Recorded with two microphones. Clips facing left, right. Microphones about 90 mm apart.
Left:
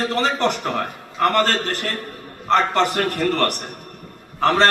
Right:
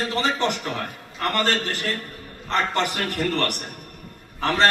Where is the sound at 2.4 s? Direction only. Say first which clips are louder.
Left 6 dB; 40° left (ahead or behind).